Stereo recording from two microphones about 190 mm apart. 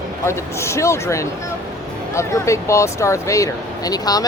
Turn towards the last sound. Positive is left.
turn(degrees=20)  # may be behind; listen again after turning